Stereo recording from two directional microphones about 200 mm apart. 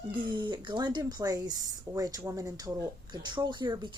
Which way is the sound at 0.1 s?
25° right (ahead or behind).